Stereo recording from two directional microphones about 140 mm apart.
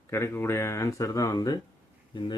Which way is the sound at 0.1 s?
20° left (ahead or behind).